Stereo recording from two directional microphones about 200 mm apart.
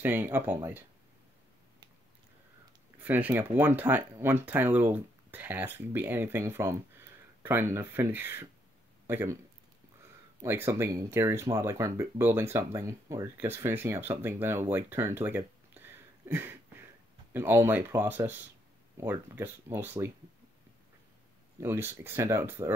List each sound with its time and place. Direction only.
0.0 s speech: 10° right (ahead or behind)
3.0 s speech: 10° right (ahead or behind)
10.4 s speech: 15° right (ahead or behind)
16.3 s a sound: 10° right (ahead or behind)
17.3 s speech: 10° right (ahead or behind)
21.5 s speech: 10° right (ahead or behind)